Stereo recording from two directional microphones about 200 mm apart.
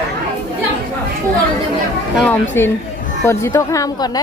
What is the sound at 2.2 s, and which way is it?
A woman's voice, 10° left (ahead or behind).